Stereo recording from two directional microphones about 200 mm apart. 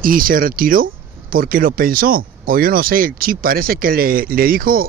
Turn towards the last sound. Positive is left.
turn(degrees=-45)  # may be behind; listen again after turning